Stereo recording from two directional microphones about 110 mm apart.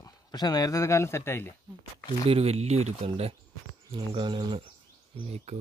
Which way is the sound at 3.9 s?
50° right (ahead or behind).